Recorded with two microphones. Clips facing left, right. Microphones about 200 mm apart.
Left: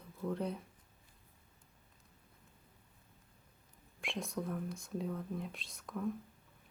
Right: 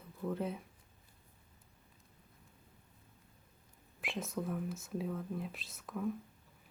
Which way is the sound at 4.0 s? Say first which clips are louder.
Right 1 dB; centre (ahead or behind).